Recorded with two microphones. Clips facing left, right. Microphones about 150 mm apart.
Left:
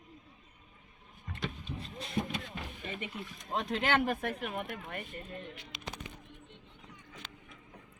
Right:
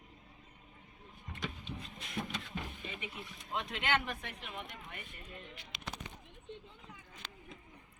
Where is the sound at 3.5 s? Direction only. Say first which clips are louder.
Left 4 dB; 35° left (ahead or behind); by 5.3 s 50° left (ahead or behind).